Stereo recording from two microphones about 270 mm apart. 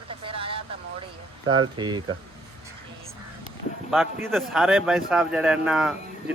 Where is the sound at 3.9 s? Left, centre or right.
Centre.